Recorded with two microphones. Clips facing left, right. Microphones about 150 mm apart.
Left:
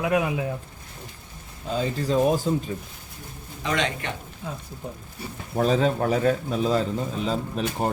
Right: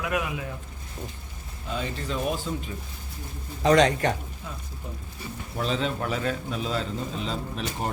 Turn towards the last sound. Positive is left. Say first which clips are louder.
# left 5 dB
turn(degrees=40)  # may be behind; listen again after turning